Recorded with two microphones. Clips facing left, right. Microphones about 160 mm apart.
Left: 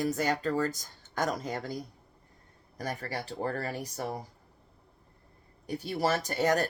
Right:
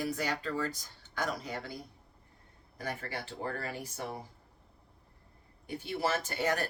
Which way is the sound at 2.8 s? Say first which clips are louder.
Left 3 dB; 40° left (ahead or behind).